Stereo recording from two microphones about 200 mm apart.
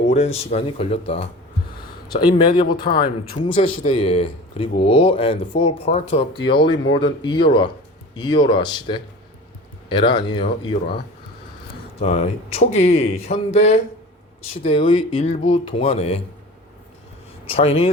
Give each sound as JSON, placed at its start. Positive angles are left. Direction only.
{"t": 0.1, "sound": "speech", "side_deg": 30}
{"t": 2.2, "sound": "speech", "side_deg": 25}
{"t": 11.9, "sound": "speech", "side_deg": 30}
{"t": 17.4, "sound": "speech", "side_deg": 30}